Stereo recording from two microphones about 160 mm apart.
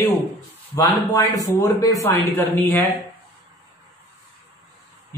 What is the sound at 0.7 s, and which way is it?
Speech, 20° left (ahead or behind).